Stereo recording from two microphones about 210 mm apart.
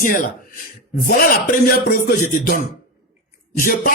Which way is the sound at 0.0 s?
40° left (ahead or behind).